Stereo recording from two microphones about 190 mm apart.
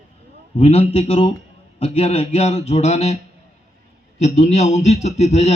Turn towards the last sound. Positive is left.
turn(degrees=35)  # may be behind; listen again after turning